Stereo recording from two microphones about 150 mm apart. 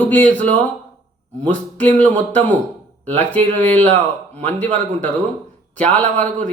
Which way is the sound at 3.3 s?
10° left (ahead or behind).